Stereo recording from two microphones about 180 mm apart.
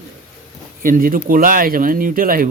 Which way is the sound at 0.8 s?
50° right (ahead or behind).